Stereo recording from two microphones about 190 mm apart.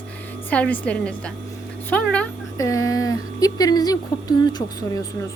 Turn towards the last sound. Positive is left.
turn(degrees=20)  # may be behind; listen again after turning